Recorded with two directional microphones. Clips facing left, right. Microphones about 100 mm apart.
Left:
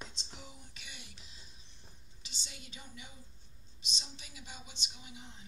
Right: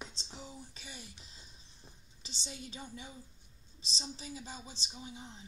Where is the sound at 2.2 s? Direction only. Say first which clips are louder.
Right 7 dB; 30° right (ahead or behind).